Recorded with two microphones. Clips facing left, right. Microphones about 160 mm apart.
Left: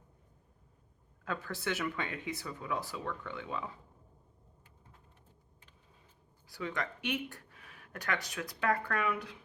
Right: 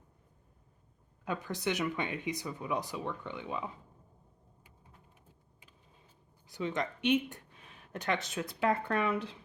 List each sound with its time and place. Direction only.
1.2 s speech: 15° right (ahead or behind)
6.5 s speech: 20° right (ahead or behind)